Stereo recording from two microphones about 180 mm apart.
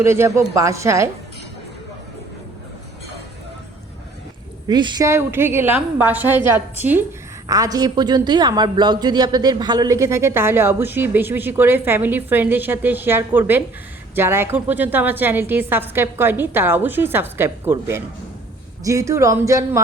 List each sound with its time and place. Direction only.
0.0 s a woman's voice: 15° right (ahead or behind)
4.7 s a woman's voice: 25° right (ahead or behind)